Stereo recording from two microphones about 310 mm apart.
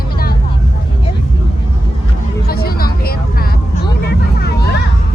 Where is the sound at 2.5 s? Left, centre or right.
Left.